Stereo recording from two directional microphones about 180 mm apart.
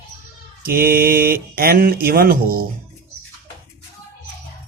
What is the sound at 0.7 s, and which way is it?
Speech, 55° right (ahead or behind).